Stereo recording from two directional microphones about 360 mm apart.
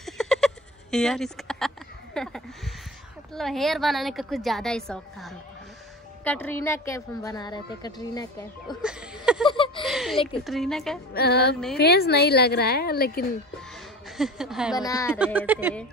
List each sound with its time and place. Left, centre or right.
0.0 s a sound: centre
0.9 s a woman's voice: centre
2.1 s a sound: centre
3.3 s a woman's voice: centre
8.8 s a sound: centre
10.1 s a woman's voice: centre
10.4 s a woman's voice: centre
11.1 s a woman's voice: left
14.0 s speech: centre
14.8 s a woman's voice: centre
15.1 s a woman's voice: centre